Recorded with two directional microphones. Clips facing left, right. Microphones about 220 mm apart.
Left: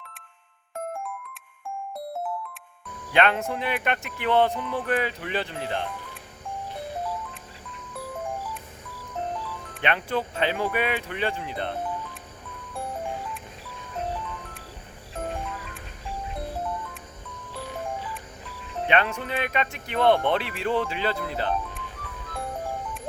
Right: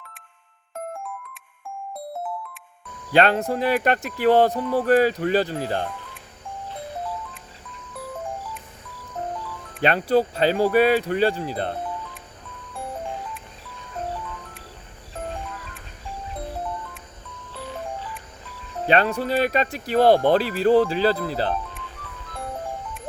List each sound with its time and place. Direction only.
3.1 s speech: 35° right (ahead or behind)
9.8 s speech: 35° right (ahead or behind)
18.9 s speech: 35° right (ahead or behind)